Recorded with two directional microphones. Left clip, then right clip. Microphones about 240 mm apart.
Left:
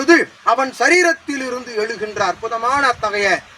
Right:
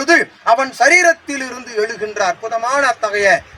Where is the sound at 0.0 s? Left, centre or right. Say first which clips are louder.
Even; right.